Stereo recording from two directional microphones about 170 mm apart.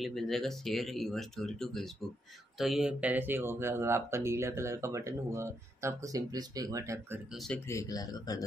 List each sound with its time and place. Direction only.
0.0 s speech: centre (ahead or behind); by 7.2 s 20° right (ahead or behind)
7.3 s speech: 5° left (ahead or behind)
7.6 s speech: 20° left (ahead or behind)